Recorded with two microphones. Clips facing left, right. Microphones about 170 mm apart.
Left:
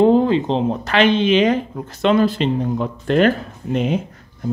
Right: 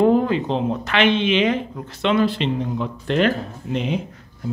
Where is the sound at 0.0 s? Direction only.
30° left (ahead or behind).